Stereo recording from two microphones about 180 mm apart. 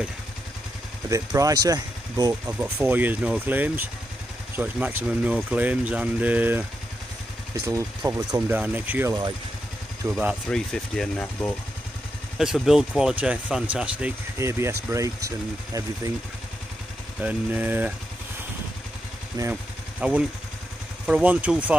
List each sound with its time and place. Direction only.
1.0 s speech: 15° right (ahead or behind)
2.4 s speech: 10° right (ahead or behind)
7.6 s speech: 15° right (ahead or behind)
10.1 s speech: centre (ahead or behind)
12.4 s speech: centre (ahead or behind)
17.2 s speech: 10° right (ahead or behind)
19.5 s gunshot: 5° right (ahead or behind)
21.1 s speech: 10° right (ahead or behind)